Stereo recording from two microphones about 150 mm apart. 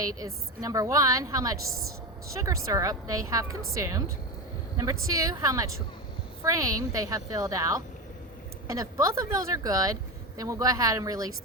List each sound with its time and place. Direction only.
0.0 s speech: 25° right (ahead or behind)